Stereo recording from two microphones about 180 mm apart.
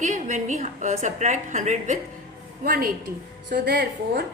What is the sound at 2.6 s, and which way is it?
A woman's voice, 55° right (ahead or behind).